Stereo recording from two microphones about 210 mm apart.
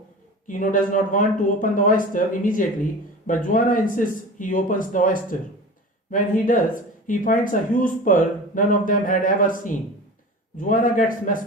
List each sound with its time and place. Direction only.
0.4 s speech: 40° left (ahead or behind)